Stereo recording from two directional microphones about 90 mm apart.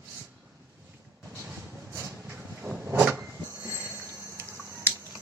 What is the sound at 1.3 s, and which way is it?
Train, 20° right (ahead or behind).